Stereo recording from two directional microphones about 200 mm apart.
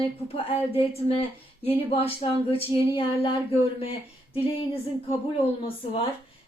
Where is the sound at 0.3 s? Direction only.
30° left (ahead or behind).